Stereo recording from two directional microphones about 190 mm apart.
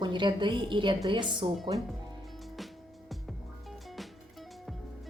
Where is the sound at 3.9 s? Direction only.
Centre (ahead or behind).